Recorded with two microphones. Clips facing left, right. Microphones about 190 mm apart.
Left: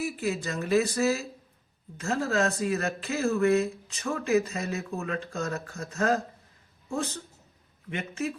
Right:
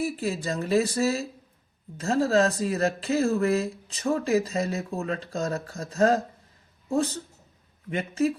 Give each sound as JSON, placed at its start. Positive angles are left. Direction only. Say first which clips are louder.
{"t": 0.0, "sound": "speech", "louder": "right 2 dB", "side_deg": -30}